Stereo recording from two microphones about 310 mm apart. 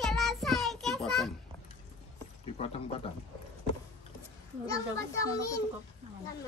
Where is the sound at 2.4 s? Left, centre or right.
Centre.